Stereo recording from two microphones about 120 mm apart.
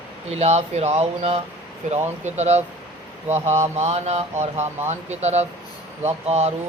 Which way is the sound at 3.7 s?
65° right (ahead or behind).